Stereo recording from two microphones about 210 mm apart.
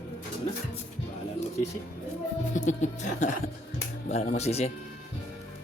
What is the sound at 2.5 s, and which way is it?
Speech, 35° left (ahead or behind).